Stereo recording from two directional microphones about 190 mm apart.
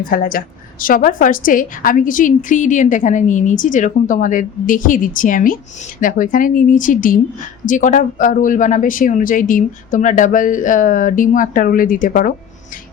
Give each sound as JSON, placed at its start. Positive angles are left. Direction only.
{"t": 0.1, "sound": "a woman's voice", "side_deg": 50}